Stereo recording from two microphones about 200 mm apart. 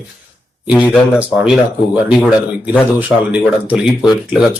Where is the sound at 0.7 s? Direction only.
10° left (ahead or behind).